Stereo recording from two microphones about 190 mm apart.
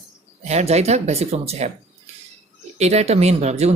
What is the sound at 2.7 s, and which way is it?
Speech, 35° right (ahead or behind).